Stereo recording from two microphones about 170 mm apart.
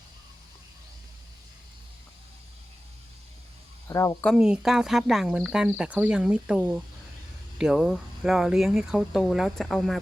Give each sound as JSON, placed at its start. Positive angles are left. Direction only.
{"t": 3.8, "sound": "speech", "side_deg": 20}
{"t": 4.4, "sound": "speech", "side_deg": -5}